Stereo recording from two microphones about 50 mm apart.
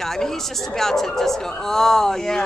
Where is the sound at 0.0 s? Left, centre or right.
Centre.